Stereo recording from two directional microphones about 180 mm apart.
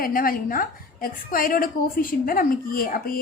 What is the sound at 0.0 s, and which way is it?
A woman's voice, 55° left (ahead or behind).